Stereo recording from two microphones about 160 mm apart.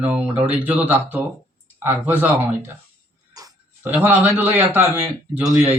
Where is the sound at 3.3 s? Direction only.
20° right (ahead or behind).